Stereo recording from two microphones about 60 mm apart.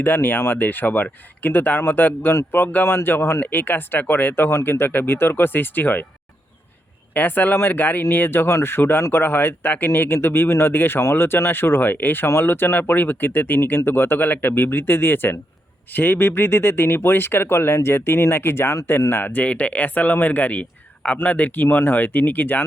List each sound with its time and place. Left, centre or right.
0.0 s speech: left
3.4 s speech: left
7.1 s speech: left